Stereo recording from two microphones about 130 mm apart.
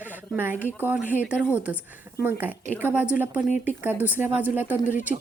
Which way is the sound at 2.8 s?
15° right (ahead or behind).